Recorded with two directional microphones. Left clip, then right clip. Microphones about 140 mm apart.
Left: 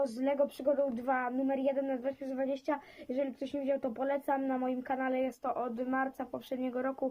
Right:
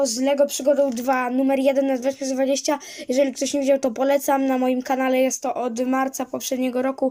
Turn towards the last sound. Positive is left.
turn(degrees=-10)  # may be behind; listen again after turning